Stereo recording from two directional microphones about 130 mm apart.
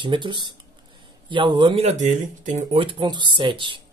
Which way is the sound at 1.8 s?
60° right (ahead or behind).